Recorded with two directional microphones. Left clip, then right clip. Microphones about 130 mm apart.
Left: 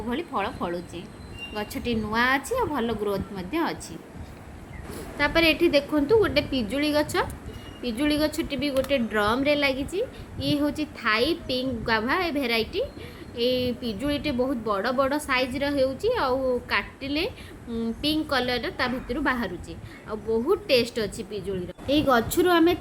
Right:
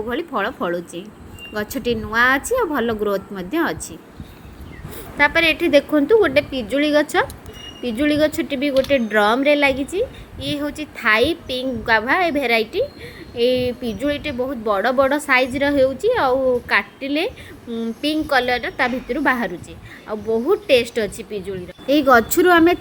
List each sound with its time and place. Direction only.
0.1 s a woman's voice: 30° right (ahead or behind)
5.1 s speech: 30° right (ahead or behind)
21.8 s a woman's voice: 45° right (ahead or behind)